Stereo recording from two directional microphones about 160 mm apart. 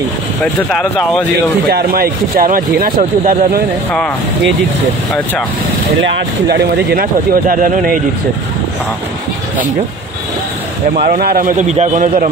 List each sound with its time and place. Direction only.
0.4 s speech: centre (ahead or behind)
1.7 s speech: 75° right (ahead or behind)
6.5 s speech: 80° right; by 8.0 s 60° right (ahead or behind)
11.0 s speech: 70° right (ahead or behind); by 12.3 s 50° right (ahead or behind)